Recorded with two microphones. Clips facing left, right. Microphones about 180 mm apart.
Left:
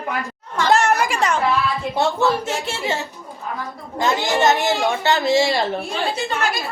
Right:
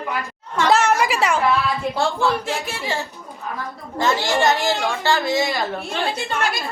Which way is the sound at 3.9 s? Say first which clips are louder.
Even; 15° left (ahead or behind).